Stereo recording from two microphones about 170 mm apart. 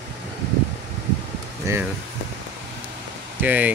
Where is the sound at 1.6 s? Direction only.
15° right (ahead or behind).